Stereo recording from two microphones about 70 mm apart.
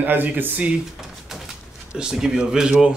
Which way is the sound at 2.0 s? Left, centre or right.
Centre.